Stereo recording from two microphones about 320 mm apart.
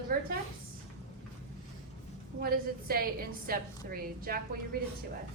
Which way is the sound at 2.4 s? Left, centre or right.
Right.